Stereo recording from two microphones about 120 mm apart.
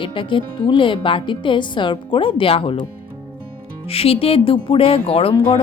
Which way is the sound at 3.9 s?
55° left (ahead or behind).